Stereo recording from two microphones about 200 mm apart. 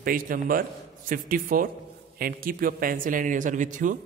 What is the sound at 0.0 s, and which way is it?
A man's voice, 45° right (ahead or behind).